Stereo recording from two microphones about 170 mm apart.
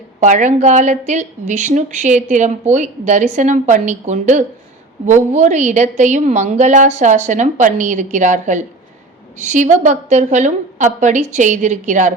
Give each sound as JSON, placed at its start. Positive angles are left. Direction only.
{"t": 0.2, "sound": "speech", "side_deg": -45}